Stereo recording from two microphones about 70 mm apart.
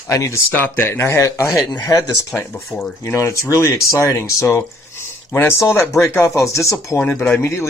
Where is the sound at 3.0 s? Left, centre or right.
Left.